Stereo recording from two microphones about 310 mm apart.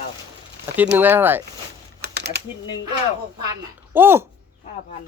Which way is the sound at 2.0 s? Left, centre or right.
Right.